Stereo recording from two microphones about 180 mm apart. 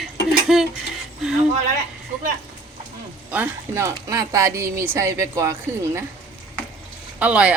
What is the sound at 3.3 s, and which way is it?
Speech, 10° right (ahead or behind).